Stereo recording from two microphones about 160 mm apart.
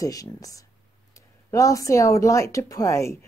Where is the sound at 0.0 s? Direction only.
20° left (ahead or behind).